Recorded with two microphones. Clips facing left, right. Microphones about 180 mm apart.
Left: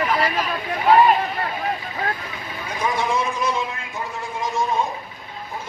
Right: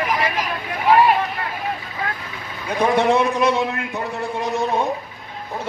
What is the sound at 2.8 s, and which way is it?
A man's voice, 65° right (ahead or behind).